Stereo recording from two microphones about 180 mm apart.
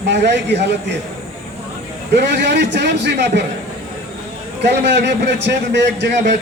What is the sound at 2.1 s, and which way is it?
A man's voice, 75° right (ahead or behind).